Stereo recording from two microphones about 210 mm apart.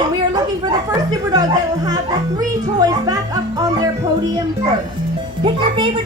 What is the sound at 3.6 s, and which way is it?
Music, 15° right (ahead or behind).